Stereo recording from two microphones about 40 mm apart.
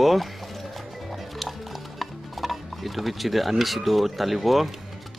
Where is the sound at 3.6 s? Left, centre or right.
Centre.